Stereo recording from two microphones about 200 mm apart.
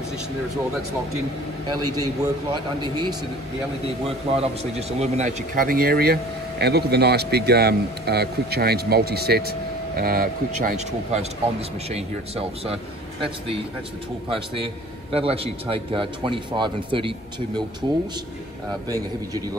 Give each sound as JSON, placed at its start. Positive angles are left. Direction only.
{"t": 2.0, "sound": "speech", "side_deg": -20}
{"t": 4.4, "sound": "a man's voice", "side_deg": -30}
{"t": 11.9, "sound": "speech", "side_deg": -30}
{"t": 15.1, "sound": "speech", "side_deg": -30}
{"t": 18.9, "sound": "a man's voice", "side_deg": -20}